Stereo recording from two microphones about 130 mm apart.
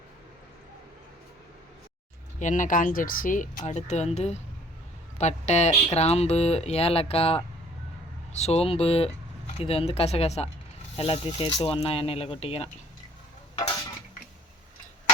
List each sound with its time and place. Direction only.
2.4 s speech: 80° left; by 12.7 s 50° left (ahead or behind)